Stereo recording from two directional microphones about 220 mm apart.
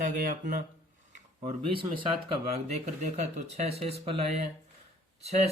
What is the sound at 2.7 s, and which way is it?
Speech, 30° right (ahead or behind).